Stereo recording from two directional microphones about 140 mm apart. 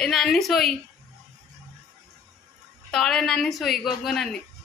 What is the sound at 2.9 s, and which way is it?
A woman's voice, 5° left (ahead or behind).